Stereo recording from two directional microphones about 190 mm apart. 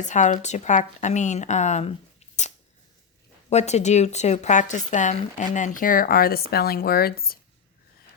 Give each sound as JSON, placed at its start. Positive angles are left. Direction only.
{"t": 0.0, "sound": "speech", "side_deg": 40}
{"t": 3.5, "sound": "speech", "side_deg": 35}